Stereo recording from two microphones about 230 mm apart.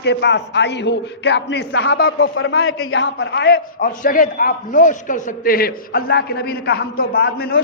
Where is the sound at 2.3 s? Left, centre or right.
Left.